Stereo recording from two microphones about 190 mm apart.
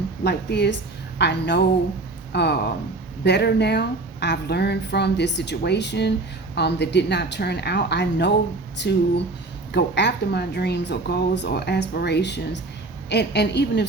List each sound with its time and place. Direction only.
0.3 s speech: 60° left (ahead or behind)